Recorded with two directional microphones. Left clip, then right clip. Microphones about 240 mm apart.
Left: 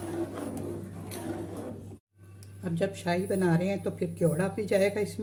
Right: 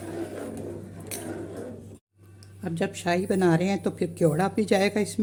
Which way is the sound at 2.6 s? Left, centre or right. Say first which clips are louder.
Right 2 dB; right.